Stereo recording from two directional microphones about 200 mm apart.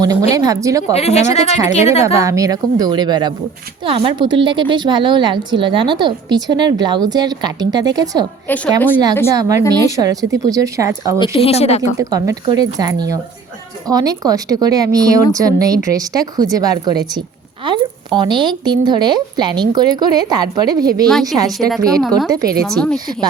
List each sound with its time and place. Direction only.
0.0 s a woman's voice: 20° right (ahead or behind)
0.9 s a woman's voice: 35° left (ahead or behind)
2.1 s a woman's voice: 15° right (ahead or behind)
8.4 s a woman's voice: 5° left (ahead or behind)
9.3 s a woman's voice: 15° right (ahead or behind)
11.3 s a woman's voice: 30° left (ahead or behind)
11.8 s a woman's voice: 15° right (ahead or behind)
21.1 s speech: centre (ahead or behind)
21.3 s a woman's voice: 20° right (ahead or behind)
22.6 s speech: 5° left (ahead or behind)